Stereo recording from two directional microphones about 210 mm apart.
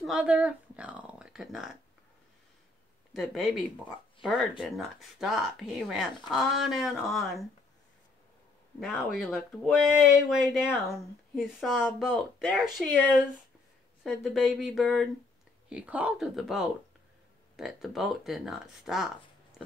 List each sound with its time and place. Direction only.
0.0 s speech: 5° right (ahead or behind)
3.1 s speech: centre (ahead or behind)
8.7 s speech: centre (ahead or behind)
14.0 s speech: centre (ahead or behind)